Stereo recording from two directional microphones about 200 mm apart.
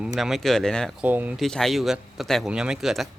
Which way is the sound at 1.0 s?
10° right (ahead or behind).